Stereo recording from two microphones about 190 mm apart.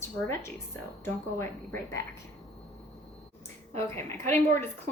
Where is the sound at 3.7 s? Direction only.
15° left (ahead or behind).